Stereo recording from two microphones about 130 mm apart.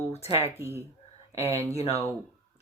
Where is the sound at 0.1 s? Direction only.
55° left (ahead or behind).